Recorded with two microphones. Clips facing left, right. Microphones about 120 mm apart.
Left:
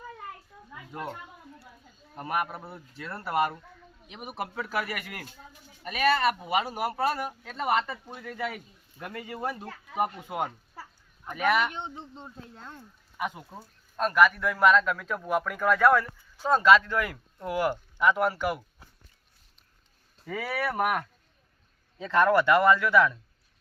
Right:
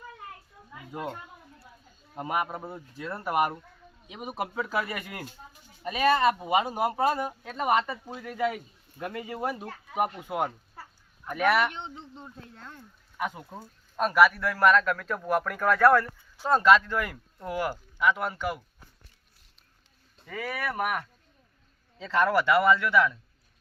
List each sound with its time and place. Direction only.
0.9 s speech: 15° right (ahead or behind)
2.1 s speech: 20° right (ahead or behind)
11.4 s speech: 15° left (ahead or behind)
11.7 s speech: 30° left (ahead or behind)
13.1 s speech: centre (ahead or behind)
13.6 s speech: 10° right (ahead or behind); by 18.6 s 10° left (ahead or behind)
20.1 s speech: 5° left (ahead or behind)
22.2 s speech: 5° right (ahead or behind)